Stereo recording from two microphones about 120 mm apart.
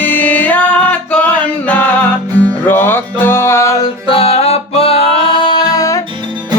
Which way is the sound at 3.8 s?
50° left (ahead or behind).